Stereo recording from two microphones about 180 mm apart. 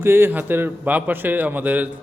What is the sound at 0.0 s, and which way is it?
A man's voice, 10° right (ahead or behind).